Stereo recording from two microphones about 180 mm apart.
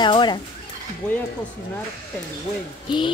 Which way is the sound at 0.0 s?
25° left (ahead or behind).